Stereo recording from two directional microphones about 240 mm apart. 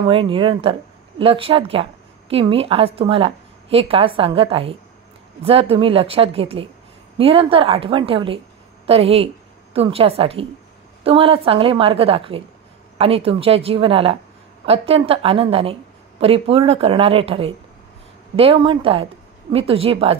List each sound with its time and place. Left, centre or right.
0.1 s a woman's voice: right